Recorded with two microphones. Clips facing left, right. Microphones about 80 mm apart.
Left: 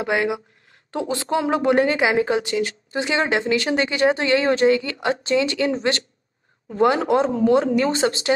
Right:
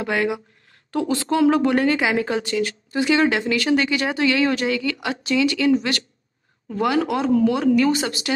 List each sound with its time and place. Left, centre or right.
0.0 s a woman's voice: left